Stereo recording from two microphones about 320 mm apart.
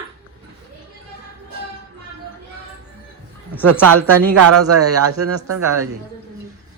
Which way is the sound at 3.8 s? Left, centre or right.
Right.